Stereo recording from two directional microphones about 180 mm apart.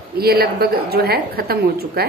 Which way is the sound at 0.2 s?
60° right (ahead or behind).